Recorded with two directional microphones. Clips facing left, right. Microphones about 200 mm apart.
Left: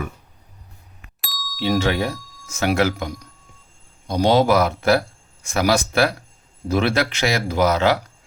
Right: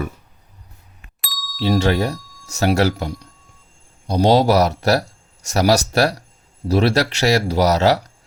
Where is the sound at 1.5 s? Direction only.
40° right (ahead or behind).